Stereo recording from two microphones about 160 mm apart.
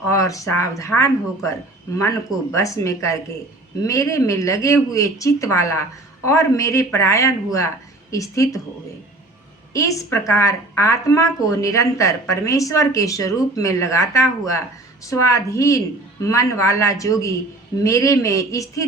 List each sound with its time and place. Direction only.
0.1 s speech: 20° left (ahead or behind)
9.7 s speech: 20° left (ahead or behind)